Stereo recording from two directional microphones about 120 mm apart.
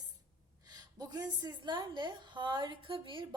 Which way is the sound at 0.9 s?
35° right (ahead or behind).